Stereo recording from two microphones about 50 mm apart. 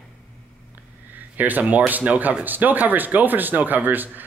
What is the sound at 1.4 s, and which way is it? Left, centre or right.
Speech, right.